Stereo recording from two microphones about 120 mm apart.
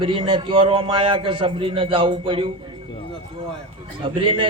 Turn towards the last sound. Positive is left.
turn(degrees=-45)  # may be behind; listen again after turning